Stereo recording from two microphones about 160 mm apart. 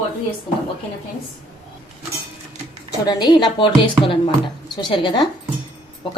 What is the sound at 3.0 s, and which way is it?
A woman's voice, 25° left (ahead or behind).